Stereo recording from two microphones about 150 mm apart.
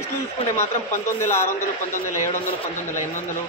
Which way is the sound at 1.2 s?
15° left (ahead or behind).